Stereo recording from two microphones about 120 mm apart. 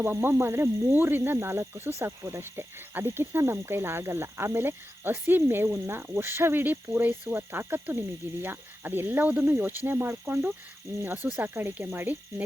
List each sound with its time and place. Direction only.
0.0 s speech: 15° right (ahead or behind)